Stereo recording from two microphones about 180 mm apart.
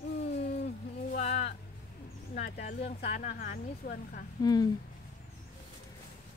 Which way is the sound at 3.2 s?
50° left (ahead or behind).